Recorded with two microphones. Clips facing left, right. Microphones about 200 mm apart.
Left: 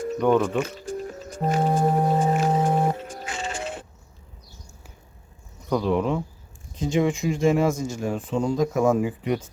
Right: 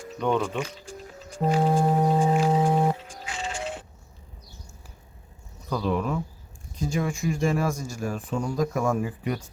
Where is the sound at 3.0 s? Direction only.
50° left (ahead or behind).